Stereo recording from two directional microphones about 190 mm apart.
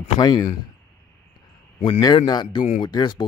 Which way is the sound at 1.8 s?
20° left (ahead or behind).